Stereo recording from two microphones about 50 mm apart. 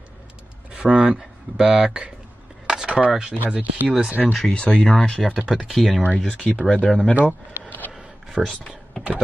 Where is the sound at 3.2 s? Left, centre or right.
Centre.